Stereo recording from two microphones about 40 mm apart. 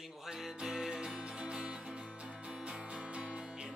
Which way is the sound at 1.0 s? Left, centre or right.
Right.